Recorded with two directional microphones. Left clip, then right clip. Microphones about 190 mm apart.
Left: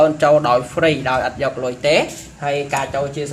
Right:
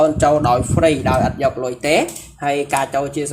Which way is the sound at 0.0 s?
25° right (ahead or behind).